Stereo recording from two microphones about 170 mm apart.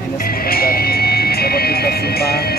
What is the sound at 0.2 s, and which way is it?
Music, 60° left (ahead or behind).